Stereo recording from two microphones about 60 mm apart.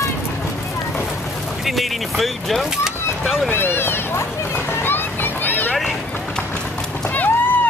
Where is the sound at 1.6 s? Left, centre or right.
Centre.